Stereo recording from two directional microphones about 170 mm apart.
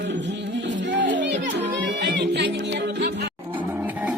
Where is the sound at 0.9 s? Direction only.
90° right.